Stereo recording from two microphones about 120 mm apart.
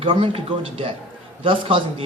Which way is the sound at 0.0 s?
50° right (ahead or behind).